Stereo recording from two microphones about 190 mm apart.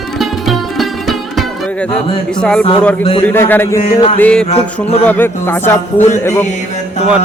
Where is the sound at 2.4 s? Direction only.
5° left (ahead or behind).